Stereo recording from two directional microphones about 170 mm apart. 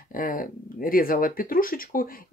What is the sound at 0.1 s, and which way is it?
Speech, 55° left (ahead or behind).